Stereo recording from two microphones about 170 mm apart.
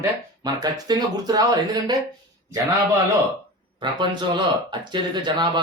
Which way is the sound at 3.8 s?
25° right (ahead or behind).